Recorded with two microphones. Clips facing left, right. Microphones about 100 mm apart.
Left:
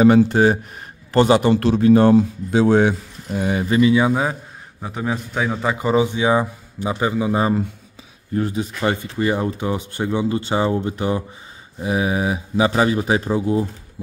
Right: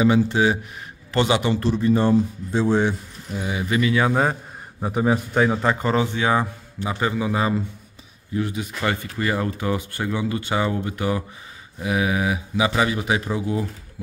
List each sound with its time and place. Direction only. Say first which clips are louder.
0.3 s speech: left 4 dB; 45° left (ahead or behind)
1.5 s speech: left 6 dB; 75° left (ahead or behind); by 3.6 s 55° left (ahead or behind)
3.6 s speech: left 6 dB; 30° left (ahead or behind)
4.1 s speech: even; centre (ahead or behind); by 7.4 s 20° left (ahead or behind)
8.4 s speech: left 4 dB; 35° left (ahead or behind)